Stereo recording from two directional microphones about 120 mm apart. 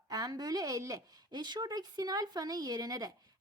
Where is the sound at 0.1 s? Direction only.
30° right (ahead or behind).